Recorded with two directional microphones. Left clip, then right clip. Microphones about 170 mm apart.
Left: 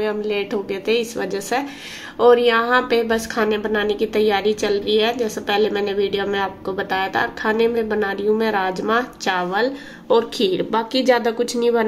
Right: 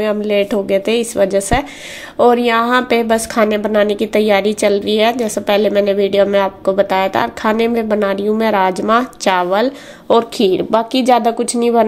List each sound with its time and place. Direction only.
0.0 s a woman's voice: 45° right (ahead or behind)